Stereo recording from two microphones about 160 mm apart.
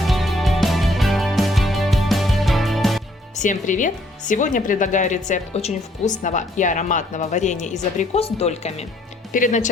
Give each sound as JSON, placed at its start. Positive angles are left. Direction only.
{"t": 0.1, "sound": "music", "side_deg": 0}
{"t": 3.3, "sound": "speech", "side_deg": 50}